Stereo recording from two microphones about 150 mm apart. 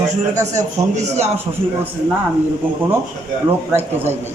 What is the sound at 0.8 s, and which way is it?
Speech, 50° right (ahead or behind).